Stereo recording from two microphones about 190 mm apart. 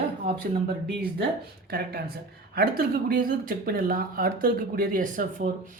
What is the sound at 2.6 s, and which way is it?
Speech, 50° right (ahead or behind).